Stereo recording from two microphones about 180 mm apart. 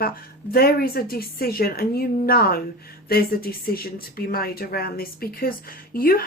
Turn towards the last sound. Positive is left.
turn(degrees=55)  # may be behind; listen again after turning